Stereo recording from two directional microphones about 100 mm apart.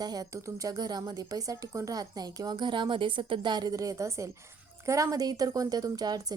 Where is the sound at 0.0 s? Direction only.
40° right (ahead or behind).